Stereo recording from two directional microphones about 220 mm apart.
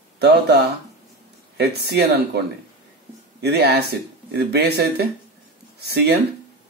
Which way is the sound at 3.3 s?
50° right (ahead or behind).